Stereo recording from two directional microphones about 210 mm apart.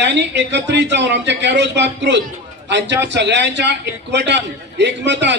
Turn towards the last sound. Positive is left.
turn(degrees=-55)  # may be behind; listen again after turning